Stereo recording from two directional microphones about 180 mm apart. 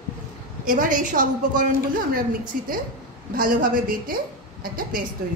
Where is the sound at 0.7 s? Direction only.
50° right (ahead or behind).